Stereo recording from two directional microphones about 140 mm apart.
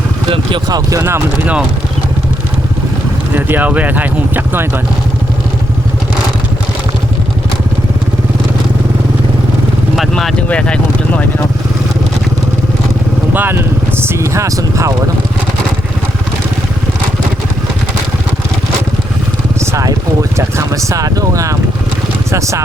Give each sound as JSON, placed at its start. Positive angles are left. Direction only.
{"t": 0.3, "sound": "speech", "side_deg": -35}
{"t": 0.9, "sound": "speech", "side_deg": -20}
{"t": 3.3, "sound": "speech", "side_deg": -10}
{"t": 9.9, "sound": "vehicle", "side_deg": 0}
{"t": 13.3, "sound": "speech", "side_deg": -15}
{"t": 19.5, "sound": "speech", "side_deg": -25}